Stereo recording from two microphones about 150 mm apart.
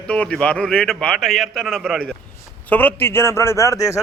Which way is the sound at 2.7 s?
10° left (ahead or behind).